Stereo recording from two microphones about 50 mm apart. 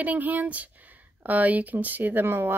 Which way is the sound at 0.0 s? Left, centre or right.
Right.